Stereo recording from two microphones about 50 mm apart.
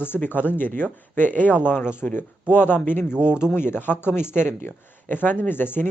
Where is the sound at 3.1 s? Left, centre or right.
Centre.